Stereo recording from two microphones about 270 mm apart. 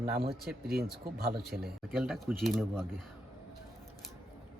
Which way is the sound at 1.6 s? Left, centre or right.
Centre.